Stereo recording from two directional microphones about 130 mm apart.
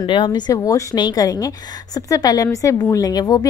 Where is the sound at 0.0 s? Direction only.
35° left (ahead or behind).